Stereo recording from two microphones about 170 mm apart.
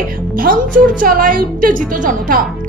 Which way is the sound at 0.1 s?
55° right (ahead or behind).